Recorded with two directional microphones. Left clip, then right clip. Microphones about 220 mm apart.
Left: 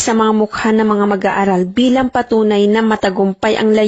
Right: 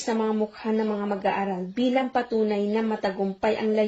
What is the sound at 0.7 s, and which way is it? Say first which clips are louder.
Speech: left 12 dB; 50° left (ahead or behind).